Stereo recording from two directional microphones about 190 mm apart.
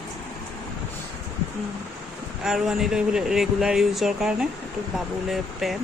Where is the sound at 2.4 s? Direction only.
5° right (ahead or behind).